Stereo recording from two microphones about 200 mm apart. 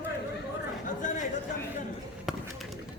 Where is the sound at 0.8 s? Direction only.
40° left (ahead or behind).